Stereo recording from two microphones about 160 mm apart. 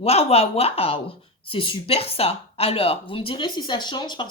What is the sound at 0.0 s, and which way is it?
Speech, 40° left (ahead or behind).